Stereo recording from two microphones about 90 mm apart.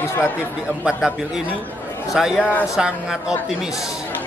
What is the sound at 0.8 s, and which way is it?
A man's voice, 10° right (ahead or behind).